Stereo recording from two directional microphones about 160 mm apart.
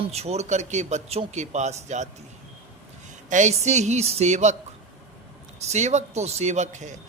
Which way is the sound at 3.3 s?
50° right (ahead or behind).